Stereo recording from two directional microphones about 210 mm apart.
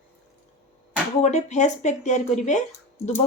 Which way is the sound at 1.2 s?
35° left (ahead or behind).